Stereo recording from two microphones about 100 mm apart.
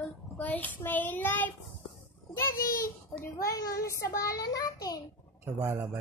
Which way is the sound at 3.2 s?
35° left (ahead or behind).